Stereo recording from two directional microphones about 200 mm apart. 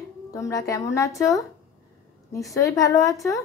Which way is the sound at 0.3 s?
15° left (ahead or behind).